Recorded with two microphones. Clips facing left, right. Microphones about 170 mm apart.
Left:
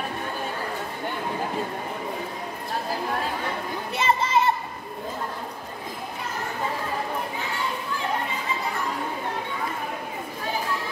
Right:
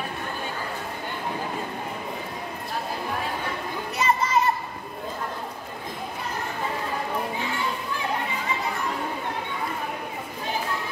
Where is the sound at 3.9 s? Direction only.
30° left (ahead or behind).